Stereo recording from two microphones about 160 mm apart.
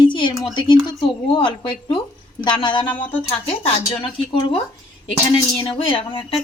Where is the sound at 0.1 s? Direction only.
30° left (ahead or behind).